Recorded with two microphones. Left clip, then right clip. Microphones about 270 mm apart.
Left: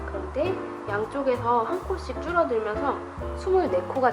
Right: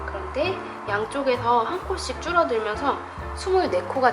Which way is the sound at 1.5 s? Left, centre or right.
Left.